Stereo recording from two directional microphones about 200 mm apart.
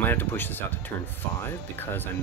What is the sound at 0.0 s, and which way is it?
Speech, 10° left (ahead or behind).